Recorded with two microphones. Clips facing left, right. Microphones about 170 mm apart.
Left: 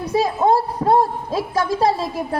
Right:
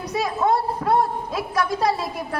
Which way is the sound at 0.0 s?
25° left (ahead or behind).